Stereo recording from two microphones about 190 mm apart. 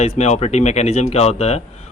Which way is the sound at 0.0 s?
35° left (ahead or behind).